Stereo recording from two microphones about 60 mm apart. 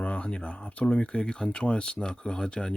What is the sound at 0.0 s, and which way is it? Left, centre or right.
Speech, centre.